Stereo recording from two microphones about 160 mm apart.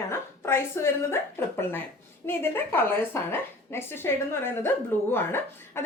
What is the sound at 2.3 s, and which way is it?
Speech, 15° left (ahead or behind).